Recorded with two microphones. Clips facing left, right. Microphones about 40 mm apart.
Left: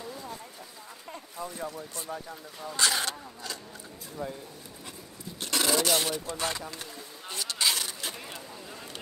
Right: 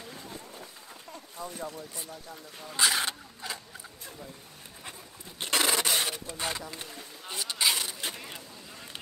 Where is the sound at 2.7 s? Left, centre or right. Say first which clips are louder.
Right 1 dB; centre.